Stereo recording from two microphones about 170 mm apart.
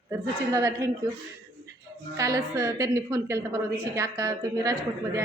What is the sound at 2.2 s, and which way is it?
A woman's voice, 20° right (ahead or behind).